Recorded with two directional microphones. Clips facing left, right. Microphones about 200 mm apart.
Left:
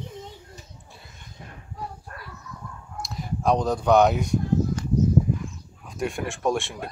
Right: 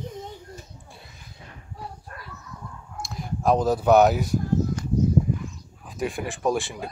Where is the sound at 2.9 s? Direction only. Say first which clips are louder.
Left 1 dB; centre (ahead or behind).